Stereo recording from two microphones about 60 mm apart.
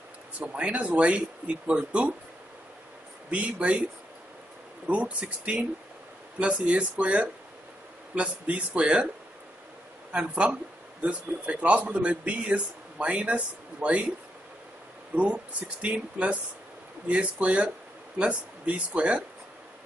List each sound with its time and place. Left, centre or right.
0.5 s speech: centre
3.3 s speech: right
4.8 s speech: right
10.1 s speech: right
15.1 s speech: right